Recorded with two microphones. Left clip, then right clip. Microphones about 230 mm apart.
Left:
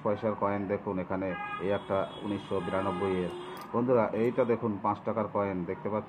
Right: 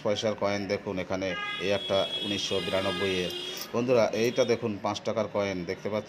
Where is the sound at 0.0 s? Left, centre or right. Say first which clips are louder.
Right 2 dB; right.